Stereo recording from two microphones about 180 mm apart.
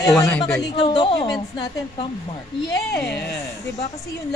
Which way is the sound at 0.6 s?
30° left (ahead or behind).